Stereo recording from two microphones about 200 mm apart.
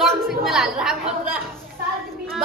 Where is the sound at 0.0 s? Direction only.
Centre (ahead or behind).